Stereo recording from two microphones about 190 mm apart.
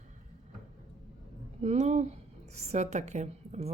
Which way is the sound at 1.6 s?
35° right (ahead or behind).